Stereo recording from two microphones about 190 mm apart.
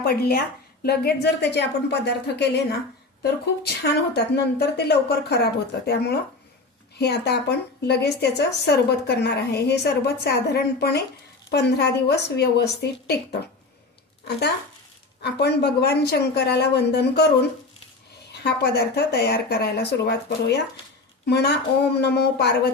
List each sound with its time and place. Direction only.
0.0 s a woman's voice: 55° left (ahead or behind)
14.3 s a woman's voice: 60° left (ahead or behind)
18.3 s a woman's voice: 60° left (ahead or behind)